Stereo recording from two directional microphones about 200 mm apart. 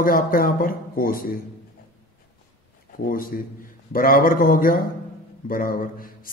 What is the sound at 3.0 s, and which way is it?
A man's voice, 45° left (ahead or behind).